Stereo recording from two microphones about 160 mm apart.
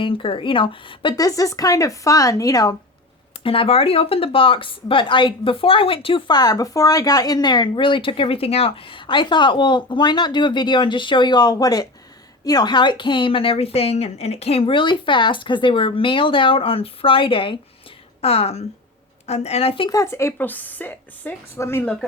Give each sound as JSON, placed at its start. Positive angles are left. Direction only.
{"t": 0.0, "sound": "speech", "side_deg": 35}
{"t": 3.4, "sound": "speech", "side_deg": 35}
{"t": 19.9, "sound": "a woman's voice", "side_deg": 20}